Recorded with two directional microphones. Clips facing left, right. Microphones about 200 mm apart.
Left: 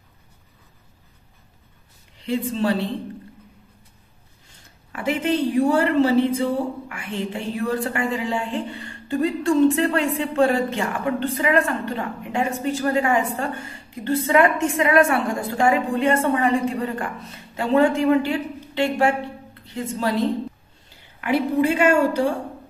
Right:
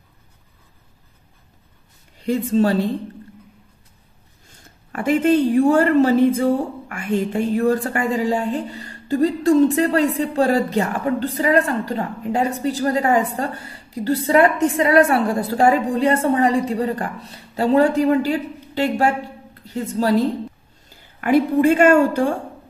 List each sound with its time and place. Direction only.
2.1 s speech: 45° right (ahead or behind)
4.9 s a man's voice: 50° right (ahead or behind)